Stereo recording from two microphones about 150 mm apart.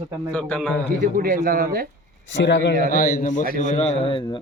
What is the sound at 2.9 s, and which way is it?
Speech, 80° left.